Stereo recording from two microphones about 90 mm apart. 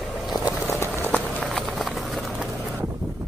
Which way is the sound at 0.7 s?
30° left (ahead or behind).